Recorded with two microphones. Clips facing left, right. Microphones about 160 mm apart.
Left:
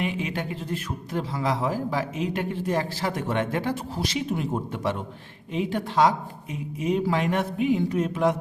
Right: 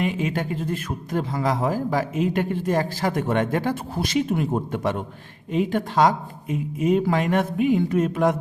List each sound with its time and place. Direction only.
0.0 s a man's voice: 45° right (ahead or behind)